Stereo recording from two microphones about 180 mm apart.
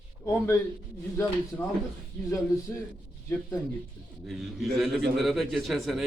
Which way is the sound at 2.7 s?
10° left (ahead or behind).